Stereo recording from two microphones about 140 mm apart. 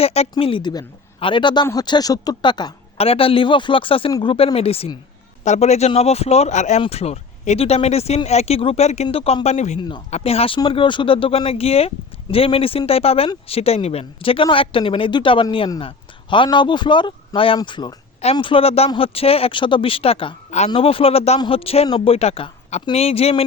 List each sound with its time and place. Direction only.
0.0 s speech: 45° left (ahead or behind); by 2.7 s 30° left (ahead or behind)
3.0 s speech: 40° left (ahead or behind)